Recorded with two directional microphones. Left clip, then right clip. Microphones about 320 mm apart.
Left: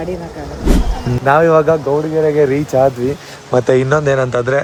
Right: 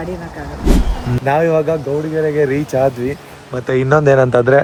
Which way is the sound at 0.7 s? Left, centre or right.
Centre.